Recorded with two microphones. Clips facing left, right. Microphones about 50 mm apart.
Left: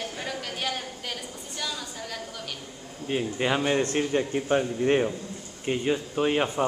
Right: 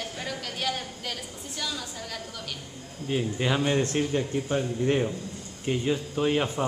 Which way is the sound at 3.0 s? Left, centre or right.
Centre.